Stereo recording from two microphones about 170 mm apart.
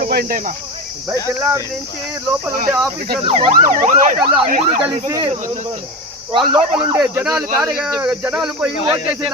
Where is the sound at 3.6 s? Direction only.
50° right (ahead or behind).